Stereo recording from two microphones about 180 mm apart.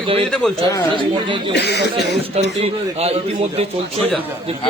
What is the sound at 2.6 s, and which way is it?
A man's voice, 35° right (ahead or behind).